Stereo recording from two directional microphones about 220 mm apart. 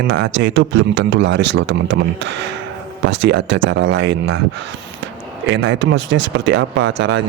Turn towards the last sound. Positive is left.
turn(degrees=-55)  # may be behind; listen again after turning